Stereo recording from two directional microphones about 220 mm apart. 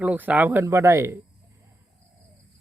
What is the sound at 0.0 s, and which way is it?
Speech, 5° right (ahead or behind).